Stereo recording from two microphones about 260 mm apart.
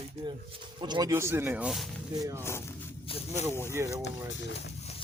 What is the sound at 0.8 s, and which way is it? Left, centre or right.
Speech, centre.